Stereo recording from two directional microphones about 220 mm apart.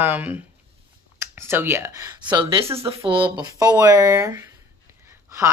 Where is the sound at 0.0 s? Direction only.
10° right (ahead or behind).